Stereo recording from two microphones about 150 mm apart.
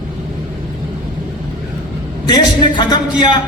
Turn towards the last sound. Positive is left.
turn(degrees=30)  # may be behind; listen again after turning